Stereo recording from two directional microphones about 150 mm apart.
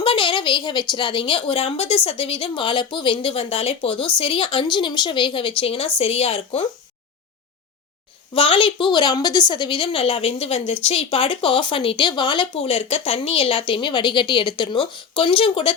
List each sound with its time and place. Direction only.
0.0 s a woman's voice: 35° left (ahead or behind)
8.3 s a woman's voice: 35° left (ahead or behind)